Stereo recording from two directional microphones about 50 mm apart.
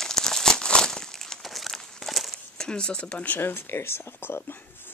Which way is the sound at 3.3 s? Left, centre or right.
Left.